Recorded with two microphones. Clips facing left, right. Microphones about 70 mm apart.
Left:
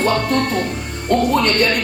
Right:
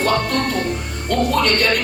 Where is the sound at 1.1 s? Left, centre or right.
Left.